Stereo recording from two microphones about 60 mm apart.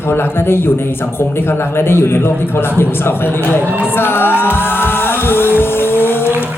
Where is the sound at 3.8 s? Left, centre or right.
Left.